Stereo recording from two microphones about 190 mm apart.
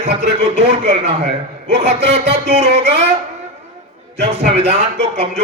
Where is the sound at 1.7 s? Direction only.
65° right (ahead or behind).